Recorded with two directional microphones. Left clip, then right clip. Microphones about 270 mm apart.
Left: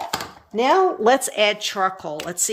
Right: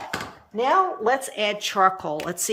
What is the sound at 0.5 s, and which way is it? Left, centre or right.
Speech, left.